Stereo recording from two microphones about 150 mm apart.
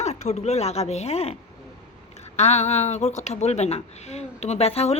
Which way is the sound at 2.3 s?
45° left (ahead or behind).